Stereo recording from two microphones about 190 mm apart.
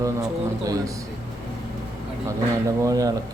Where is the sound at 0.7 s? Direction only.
20° right (ahead or behind).